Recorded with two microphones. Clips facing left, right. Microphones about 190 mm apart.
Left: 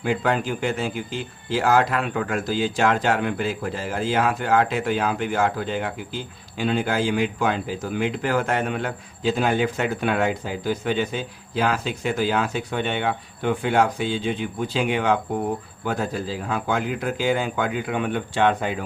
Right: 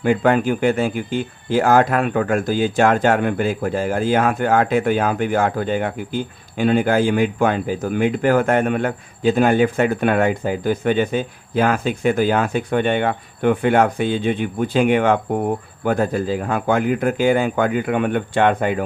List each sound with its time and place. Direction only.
0.0 s speech: 55° right (ahead or behind)